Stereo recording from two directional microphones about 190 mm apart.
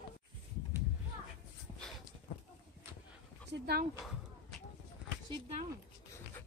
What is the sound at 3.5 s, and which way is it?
Dog, 55° right (ahead or behind).